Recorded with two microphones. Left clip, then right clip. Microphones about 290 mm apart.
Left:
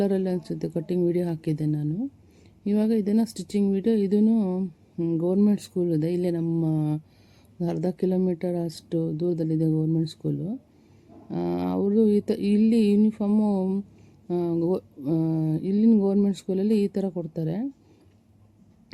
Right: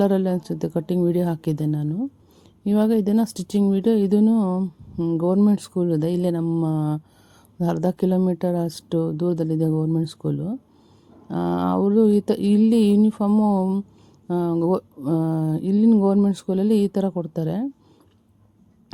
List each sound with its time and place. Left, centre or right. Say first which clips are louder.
0.0 s speech: right 5 dB; right